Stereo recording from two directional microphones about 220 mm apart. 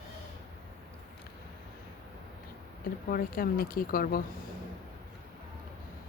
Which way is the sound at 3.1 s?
40° left (ahead or behind).